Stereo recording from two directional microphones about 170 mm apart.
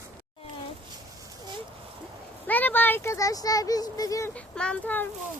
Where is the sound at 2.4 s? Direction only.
10° left (ahead or behind).